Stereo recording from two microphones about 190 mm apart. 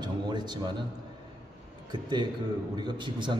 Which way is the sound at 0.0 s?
25° right (ahead or behind).